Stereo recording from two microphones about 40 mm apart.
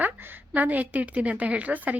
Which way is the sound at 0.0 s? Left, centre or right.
Right.